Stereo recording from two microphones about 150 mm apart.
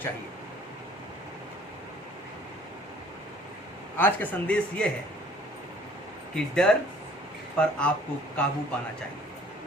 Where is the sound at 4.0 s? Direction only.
10° left (ahead or behind).